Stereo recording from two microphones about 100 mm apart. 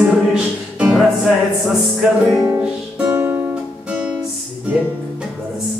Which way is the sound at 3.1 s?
20° right (ahead or behind).